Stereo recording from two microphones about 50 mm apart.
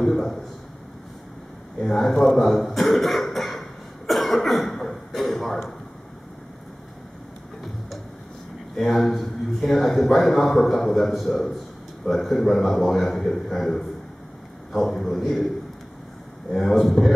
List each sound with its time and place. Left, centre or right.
0.0 s a sound: centre
1.8 s a man's voice: centre
4.1 s cough: centre
8.7 s a man's voice: centre
16.5 s a man's voice: centre